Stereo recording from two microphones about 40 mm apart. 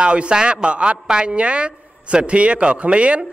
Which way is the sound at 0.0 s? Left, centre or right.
Right.